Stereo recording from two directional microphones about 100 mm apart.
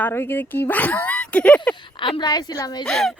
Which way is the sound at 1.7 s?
55° left (ahead or behind).